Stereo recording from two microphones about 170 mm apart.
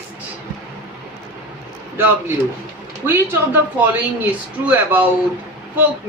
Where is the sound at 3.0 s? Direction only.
10° right (ahead or behind).